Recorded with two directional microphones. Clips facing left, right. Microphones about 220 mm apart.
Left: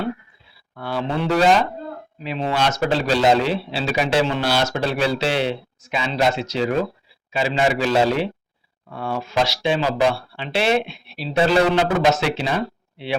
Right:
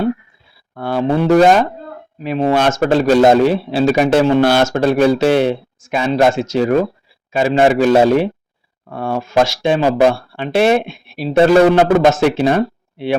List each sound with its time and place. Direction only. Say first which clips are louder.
0.7 s a man's voice: right 8 dB; 50° right (ahead or behind)